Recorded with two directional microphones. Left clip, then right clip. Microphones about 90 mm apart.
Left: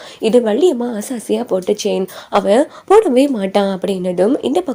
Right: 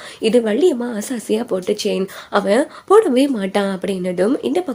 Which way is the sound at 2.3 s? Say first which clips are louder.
Left 3 dB; 35° left (ahead or behind).